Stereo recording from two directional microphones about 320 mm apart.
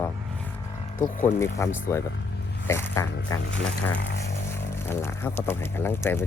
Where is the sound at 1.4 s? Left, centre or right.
Centre.